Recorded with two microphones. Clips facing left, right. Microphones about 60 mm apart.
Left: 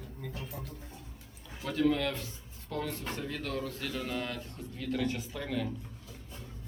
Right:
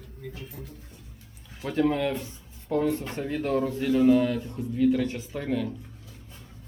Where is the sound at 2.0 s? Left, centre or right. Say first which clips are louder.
Right 6 dB; centre.